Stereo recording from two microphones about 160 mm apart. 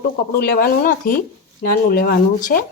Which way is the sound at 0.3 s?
70° left (ahead or behind).